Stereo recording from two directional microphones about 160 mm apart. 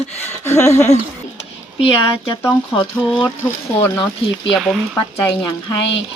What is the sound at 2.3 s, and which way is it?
Speech, 15° left (ahead or behind).